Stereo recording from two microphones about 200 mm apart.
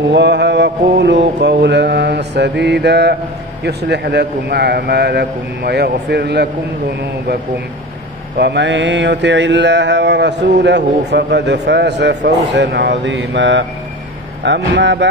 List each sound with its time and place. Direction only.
0.1 s mantra: 60° right (ahead or behind)
8.4 s mantra: 60° right (ahead or behind)